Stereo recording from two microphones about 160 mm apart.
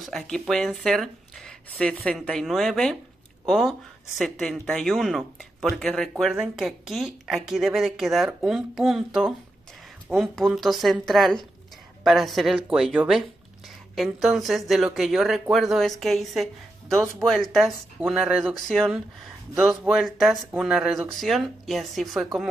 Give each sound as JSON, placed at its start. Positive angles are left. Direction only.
{"t": 0.0, "sound": "speech", "side_deg": 0}